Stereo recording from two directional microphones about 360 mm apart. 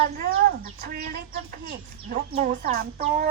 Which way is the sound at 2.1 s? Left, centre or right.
Centre.